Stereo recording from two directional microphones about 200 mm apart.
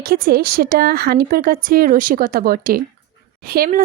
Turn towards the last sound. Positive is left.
turn(degrees=-45)  # may be behind; listen again after turning